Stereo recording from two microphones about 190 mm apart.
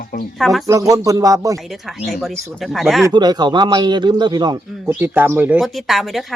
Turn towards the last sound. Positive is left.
turn(degrees=0)  # may be behind; listen again after turning